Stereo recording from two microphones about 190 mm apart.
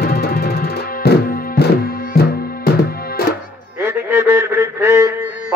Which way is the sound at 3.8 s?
15° right (ahead or behind).